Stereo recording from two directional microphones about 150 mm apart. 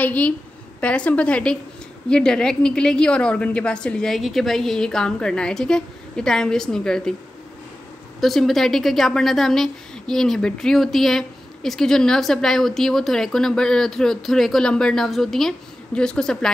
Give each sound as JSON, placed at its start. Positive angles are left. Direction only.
{"t": 0.0, "sound": "a woman's voice", "side_deg": 10}
{"t": 8.2, "sound": "a woman's voice", "side_deg": 0}